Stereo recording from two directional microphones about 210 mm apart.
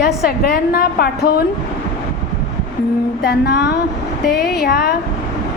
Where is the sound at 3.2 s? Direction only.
55° left (ahead or behind).